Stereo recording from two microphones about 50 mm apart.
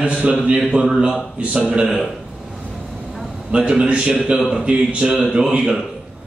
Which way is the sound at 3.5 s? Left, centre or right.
Right.